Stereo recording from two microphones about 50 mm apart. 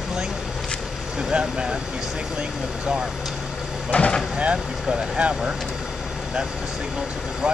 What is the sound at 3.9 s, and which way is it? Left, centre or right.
Speech, left.